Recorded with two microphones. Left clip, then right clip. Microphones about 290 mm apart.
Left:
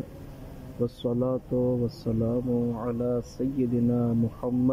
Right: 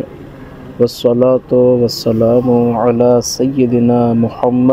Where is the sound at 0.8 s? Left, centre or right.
Centre.